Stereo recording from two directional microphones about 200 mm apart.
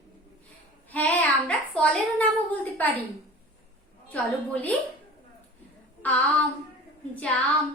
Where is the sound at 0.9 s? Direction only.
5° left (ahead or behind).